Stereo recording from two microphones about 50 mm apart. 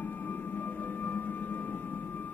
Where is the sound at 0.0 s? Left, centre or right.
Left.